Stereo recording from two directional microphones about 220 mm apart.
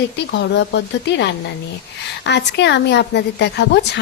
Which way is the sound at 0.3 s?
50° left (ahead or behind).